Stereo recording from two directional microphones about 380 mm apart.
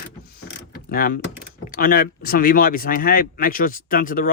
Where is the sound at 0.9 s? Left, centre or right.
Left.